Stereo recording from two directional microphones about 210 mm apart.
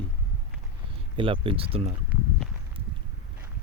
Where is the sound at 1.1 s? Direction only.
25° right (ahead or behind).